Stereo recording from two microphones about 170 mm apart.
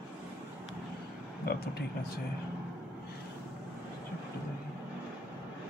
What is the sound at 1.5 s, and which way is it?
Speech, 65° left (ahead or behind).